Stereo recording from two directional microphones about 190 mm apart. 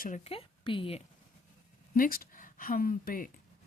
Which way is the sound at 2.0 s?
50° left (ahead or behind).